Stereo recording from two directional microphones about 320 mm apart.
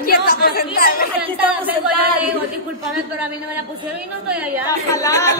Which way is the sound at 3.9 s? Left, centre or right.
Centre.